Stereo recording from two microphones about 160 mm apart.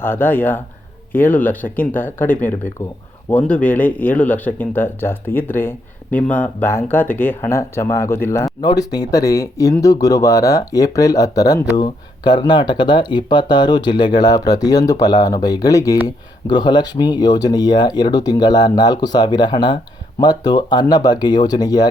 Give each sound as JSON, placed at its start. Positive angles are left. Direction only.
{"t": 0.0, "sound": "speech", "side_deg": 10}